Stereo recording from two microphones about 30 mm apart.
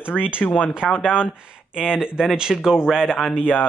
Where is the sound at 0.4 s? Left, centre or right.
Left.